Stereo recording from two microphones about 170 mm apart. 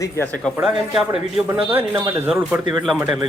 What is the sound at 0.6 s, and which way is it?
Speech, centre (ahead or behind).